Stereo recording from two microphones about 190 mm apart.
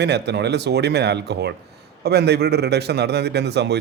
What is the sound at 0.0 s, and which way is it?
Speech, 60° right (ahead or behind).